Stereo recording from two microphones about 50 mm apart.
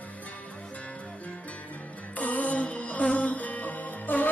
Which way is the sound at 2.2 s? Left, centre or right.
Left.